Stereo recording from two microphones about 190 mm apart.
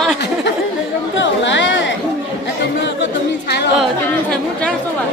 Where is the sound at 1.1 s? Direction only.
75° left (ahead or behind).